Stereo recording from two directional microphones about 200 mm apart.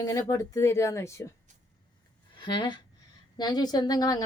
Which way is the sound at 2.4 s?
25° left (ahead or behind).